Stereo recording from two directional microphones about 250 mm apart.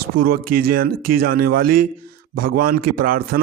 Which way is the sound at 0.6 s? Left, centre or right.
Right.